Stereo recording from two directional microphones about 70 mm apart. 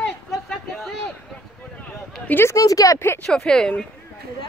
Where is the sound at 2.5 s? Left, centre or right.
Left.